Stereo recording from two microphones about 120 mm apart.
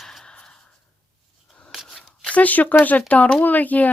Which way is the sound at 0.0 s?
Centre (ahead or behind).